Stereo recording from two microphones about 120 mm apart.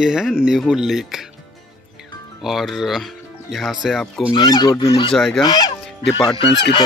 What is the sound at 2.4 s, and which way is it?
Speech, centre (ahead or behind).